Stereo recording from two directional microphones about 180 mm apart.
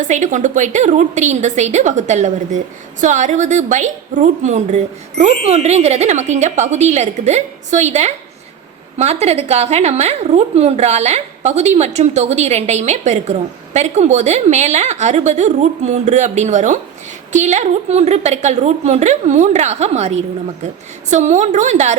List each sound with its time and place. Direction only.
0.0 s a woman's voice: 45° right (ahead or behind)